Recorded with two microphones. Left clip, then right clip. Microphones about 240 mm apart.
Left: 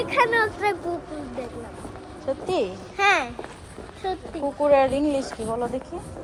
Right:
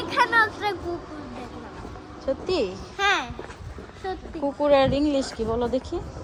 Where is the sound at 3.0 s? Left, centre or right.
Centre.